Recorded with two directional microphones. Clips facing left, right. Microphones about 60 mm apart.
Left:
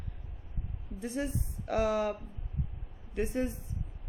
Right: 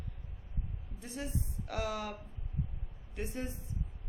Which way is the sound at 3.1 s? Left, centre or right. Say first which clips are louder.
Left 8 dB; left.